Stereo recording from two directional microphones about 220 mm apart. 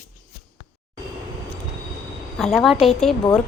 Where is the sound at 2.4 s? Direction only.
Centre (ahead or behind).